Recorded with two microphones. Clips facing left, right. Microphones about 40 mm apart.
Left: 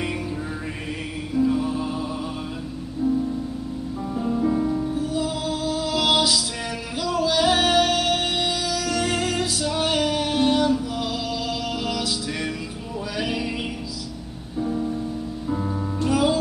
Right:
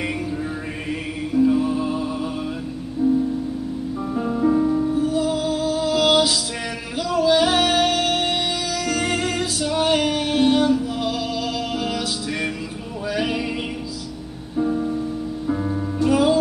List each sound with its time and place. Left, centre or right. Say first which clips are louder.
1.3 s music: right 4 dB; centre
4.1 s music: right 3 dB; centre
9.8 s female singing: right 4 dB; centre
10.0 s music: right 2 dB; centre
11.7 s music: right 2 dB; right
13.1 s music: right 4 dB; centre
14.6 s music: right 4 dB; centre